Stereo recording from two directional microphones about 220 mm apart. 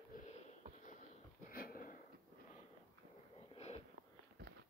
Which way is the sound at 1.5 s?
40° left (ahead or behind).